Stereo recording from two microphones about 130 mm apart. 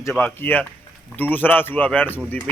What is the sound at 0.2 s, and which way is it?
A man's voice, 15° left (ahead or behind).